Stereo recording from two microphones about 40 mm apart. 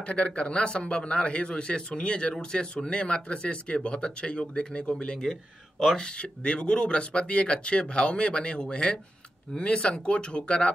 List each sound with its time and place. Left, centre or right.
0.0 s speech: left